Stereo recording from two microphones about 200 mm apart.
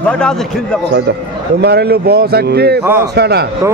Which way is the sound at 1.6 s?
55° right (ahead or behind).